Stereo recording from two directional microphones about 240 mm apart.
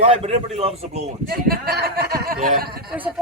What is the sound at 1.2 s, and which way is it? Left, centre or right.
A man's voice, right.